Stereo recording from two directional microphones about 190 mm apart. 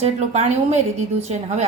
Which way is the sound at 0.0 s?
35° right (ahead or behind).